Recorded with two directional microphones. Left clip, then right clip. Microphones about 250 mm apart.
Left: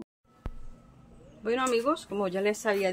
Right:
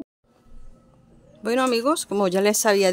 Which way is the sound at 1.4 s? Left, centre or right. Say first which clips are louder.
Right 6 dB; right.